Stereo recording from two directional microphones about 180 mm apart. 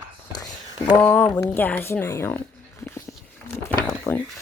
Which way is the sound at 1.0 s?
10° left (ahead or behind).